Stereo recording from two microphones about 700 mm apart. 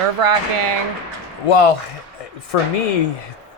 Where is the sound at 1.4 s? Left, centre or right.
Left.